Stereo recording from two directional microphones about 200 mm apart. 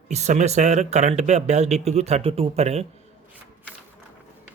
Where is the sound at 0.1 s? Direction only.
35° right (ahead or behind).